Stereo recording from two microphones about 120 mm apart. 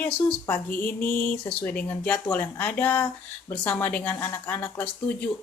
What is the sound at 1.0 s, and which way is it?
Speech, 15° left (ahead or behind).